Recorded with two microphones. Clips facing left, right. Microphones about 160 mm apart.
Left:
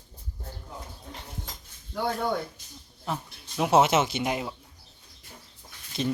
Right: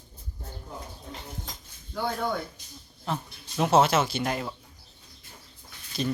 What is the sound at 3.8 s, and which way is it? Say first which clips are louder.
Speech: left 1 dB; 20° left (ahead or behind).